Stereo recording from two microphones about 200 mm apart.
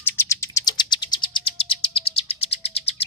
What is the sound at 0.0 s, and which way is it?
Bird, 10° left (ahead or behind).